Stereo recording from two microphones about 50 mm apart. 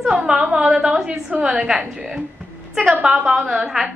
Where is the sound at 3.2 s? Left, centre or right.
Centre.